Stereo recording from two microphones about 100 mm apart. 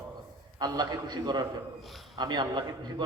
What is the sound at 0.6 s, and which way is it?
A man's voice, 45° right (ahead or behind).